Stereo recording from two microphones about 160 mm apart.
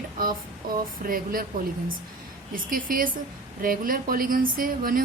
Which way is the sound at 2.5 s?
60° right (ahead or behind).